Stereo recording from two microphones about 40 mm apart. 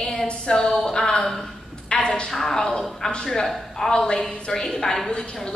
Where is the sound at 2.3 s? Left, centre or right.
Centre.